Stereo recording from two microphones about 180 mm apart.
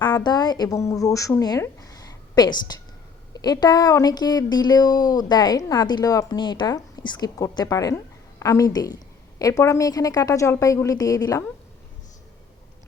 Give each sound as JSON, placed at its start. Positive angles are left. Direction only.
{"t": 0.0, "sound": "a woman's voice", "side_deg": 25}